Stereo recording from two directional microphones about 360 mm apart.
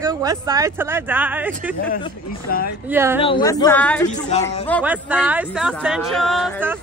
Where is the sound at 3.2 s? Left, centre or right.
Centre.